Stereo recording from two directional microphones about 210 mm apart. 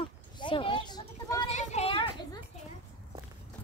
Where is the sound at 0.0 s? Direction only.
25° left (ahead or behind).